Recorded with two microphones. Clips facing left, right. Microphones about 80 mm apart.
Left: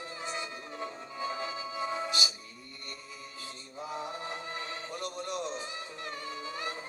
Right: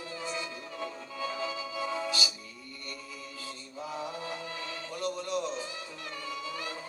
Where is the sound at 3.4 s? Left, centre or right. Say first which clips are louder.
Even; left.